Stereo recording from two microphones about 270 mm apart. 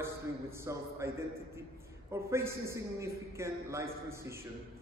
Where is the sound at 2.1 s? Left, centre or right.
Centre.